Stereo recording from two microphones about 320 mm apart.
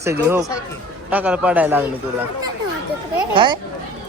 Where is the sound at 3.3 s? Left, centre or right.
Centre.